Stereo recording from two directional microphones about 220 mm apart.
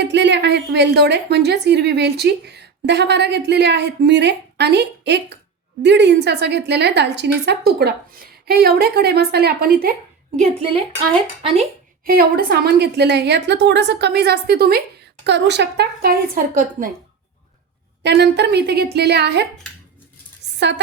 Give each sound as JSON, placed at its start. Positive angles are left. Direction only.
{"t": 0.0, "sound": "a woman's voice", "side_deg": -50}
{"t": 10.6, "sound": "a woman's voice", "side_deg": -25}
{"t": 12.0, "sound": "a woman's voice", "side_deg": -40}
{"t": 18.0, "sound": "a woman's voice", "side_deg": -50}
{"t": 20.6, "sound": "a woman's voice", "side_deg": -50}